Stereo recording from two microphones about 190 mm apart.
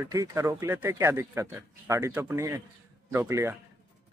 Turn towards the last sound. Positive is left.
turn(degrees=-15)  # may be behind; listen again after turning